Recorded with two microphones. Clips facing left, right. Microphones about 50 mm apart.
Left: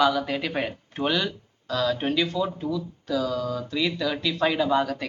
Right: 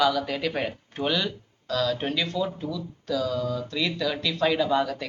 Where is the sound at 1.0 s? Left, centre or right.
Centre.